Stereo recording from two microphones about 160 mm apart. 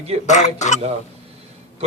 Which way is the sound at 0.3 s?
45° left (ahead or behind).